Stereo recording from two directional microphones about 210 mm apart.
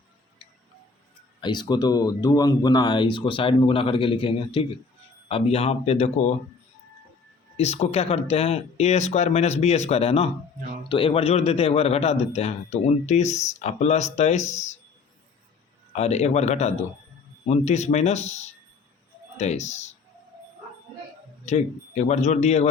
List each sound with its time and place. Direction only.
1.4 s a man's voice: 20° left (ahead or behind)
7.5 s a man's voice: 30° left (ahead or behind)
16.0 s a man's voice: 30° left (ahead or behind)
21.4 s a man's voice: 30° left (ahead or behind)